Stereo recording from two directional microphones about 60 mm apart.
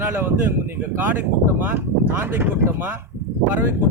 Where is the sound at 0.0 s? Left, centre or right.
Right.